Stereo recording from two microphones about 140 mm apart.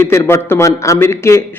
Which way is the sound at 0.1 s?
20° left (ahead or behind).